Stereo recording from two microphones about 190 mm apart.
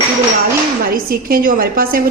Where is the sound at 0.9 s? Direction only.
50° right (ahead or behind).